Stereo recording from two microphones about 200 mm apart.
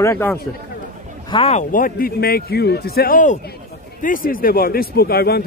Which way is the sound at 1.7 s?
45° left (ahead or behind).